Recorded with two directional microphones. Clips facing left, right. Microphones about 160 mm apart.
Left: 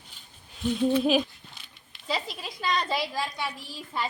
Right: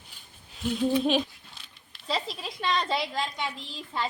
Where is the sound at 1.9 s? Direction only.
Centre (ahead or behind).